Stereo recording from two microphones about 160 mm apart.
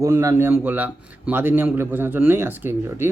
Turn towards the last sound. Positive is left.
turn(degrees=-15)  # may be behind; listen again after turning